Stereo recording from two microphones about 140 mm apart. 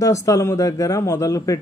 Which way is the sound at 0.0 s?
20° left (ahead or behind).